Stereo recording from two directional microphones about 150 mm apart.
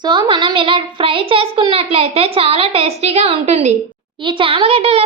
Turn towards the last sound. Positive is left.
turn(degrees=-40)  # may be behind; listen again after turning